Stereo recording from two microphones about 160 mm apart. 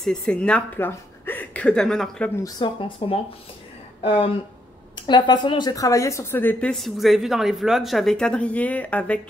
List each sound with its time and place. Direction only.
0.0 s speech: 5° left (ahead or behind)
2.4 s speech: 30° left (ahead or behind); by 9.2 s 10° left (ahead or behind)